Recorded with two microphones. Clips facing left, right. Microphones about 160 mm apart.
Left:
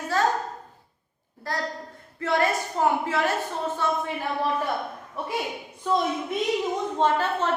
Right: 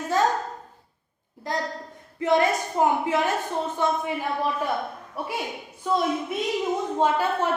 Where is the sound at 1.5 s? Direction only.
20° right (ahead or behind).